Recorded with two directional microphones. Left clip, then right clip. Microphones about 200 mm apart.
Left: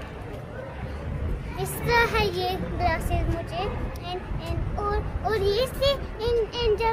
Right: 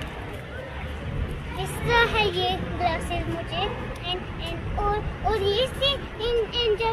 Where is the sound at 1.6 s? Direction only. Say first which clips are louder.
Right 1 dB; 20° left (ahead or behind).